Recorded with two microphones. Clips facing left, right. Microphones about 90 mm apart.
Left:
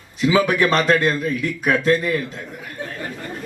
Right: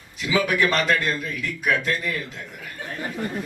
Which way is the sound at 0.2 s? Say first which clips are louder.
Left 5 dB; 35° left (ahead or behind).